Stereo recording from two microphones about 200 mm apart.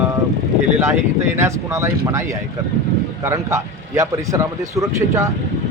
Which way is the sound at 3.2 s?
15° right (ahead or behind).